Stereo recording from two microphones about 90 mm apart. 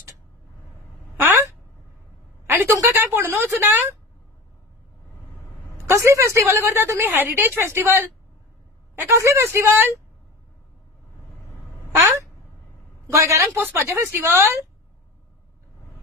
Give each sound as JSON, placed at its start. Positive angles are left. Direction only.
{"t": 2.4, "sound": "a sound", "side_deg": -25}
{"t": 2.7, "sound": "a woman's voice", "side_deg": -30}
{"t": 5.9, "sound": "a woman's voice", "side_deg": -35}
{"t": 13.1, "sound": "a man's voice", "side_deg": -35}